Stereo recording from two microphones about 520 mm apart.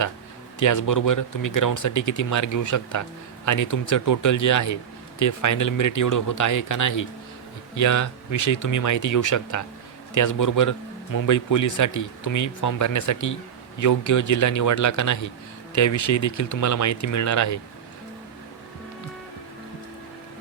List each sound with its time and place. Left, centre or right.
0.6 s a man's voice: left